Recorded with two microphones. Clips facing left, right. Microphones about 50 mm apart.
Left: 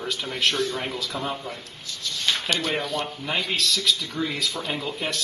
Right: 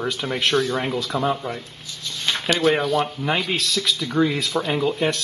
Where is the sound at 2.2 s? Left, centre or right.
Right.